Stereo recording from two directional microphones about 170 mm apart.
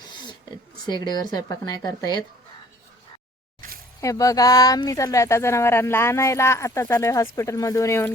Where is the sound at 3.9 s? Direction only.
20° left (ahead or behind).